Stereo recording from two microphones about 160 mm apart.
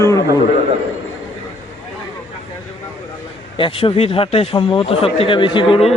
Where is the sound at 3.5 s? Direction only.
35° left (ahead or behind).